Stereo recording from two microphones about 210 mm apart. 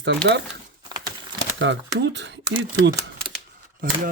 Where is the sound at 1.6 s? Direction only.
60° right (ahead or behind).